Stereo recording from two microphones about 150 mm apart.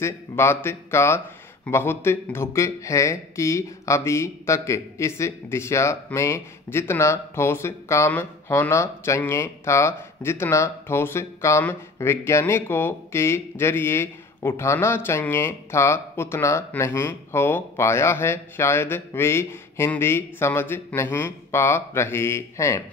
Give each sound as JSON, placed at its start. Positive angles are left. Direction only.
{"t": 0.0, "sound": "speech", "side_deg": 15}